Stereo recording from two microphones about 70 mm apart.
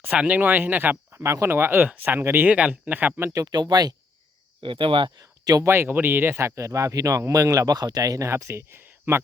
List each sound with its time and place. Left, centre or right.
0.0 s speech: centre
2.5 s speech: centre
3.5 s speech: right
5.2 s a sound: right
5.6 s speech: right
7.8 s speech: right
8.3 s speech: right